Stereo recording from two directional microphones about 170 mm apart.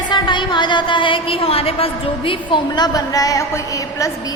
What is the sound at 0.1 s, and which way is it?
A woman's voice, 25° left (ahead or behind).